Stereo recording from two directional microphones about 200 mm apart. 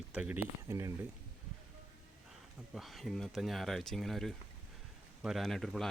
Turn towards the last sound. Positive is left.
turn(degrees=0)  # may be behind; listen again after turning